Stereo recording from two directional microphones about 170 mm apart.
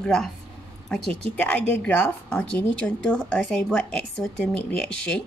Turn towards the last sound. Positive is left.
turn(degrees=5)  # may be behind; listen again after turning